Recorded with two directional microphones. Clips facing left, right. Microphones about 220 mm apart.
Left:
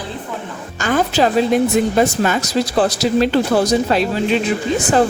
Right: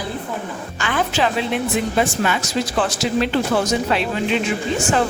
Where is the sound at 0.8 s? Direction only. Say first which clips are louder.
Left 5 dB; 40° left (ahead or behind).